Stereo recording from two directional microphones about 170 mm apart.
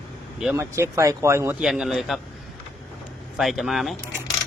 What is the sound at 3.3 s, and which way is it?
Speech, centre (ahead or behind).